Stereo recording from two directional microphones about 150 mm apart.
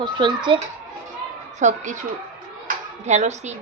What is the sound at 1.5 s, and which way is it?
Speech, 55° right (ahead or behind).